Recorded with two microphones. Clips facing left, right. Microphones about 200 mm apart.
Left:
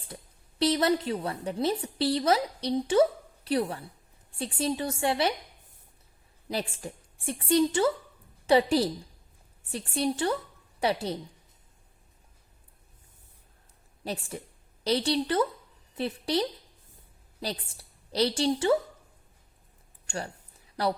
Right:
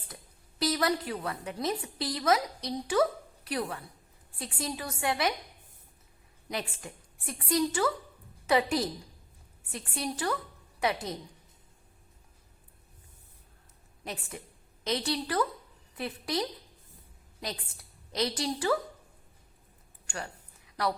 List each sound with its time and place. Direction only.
0.6 s a woman's voice: 25° left (ahead or behind)
6.5 s a woman's voice: 30° left (ahead or behind)
14.0 s a woman's voice: 30° left (ahead or behind)
20.1 s a sound: 30° left (ahead or behind)